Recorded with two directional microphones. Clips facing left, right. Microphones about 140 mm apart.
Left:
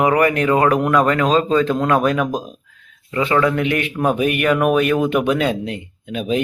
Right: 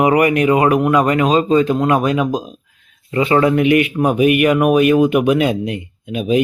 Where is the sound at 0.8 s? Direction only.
5° right (ahead or behind).